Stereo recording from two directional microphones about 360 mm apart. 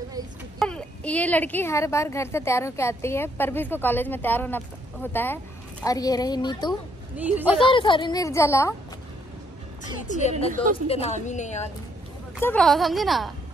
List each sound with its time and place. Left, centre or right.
0.6 s a woman's voice: centre
7.3 s a woman's voice: centre
7.6 s speech: centre
10.1 s a woman's voice: left
12.4 s a woman's voice: centre